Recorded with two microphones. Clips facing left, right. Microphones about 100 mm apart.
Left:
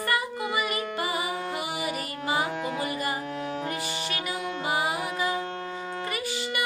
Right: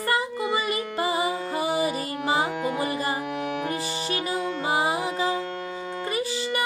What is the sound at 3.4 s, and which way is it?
Music, 65° right (ahead or behind).